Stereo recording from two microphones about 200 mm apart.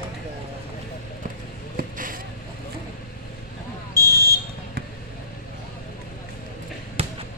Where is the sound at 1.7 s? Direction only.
45° right (ahead or behind).